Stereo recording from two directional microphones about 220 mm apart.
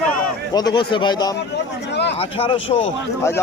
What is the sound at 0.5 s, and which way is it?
Speech, 20° left (ahead or behind).